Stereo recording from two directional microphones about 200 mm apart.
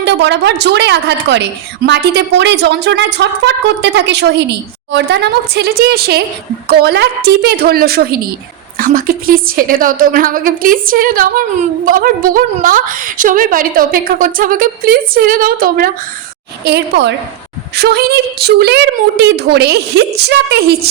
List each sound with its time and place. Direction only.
0.0 s a woman's voice: 60° right (ahead or behind)
16.6 s a woman's voice: 60° right (ahead or behind)